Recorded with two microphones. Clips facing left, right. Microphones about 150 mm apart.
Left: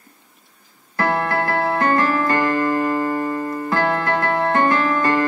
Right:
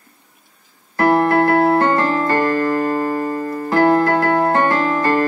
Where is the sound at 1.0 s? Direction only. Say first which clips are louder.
Right 7 dB; 25° right (ahead or behind).